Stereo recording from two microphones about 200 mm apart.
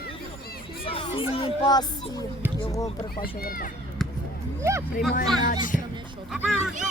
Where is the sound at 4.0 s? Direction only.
Centre (ahead or behind).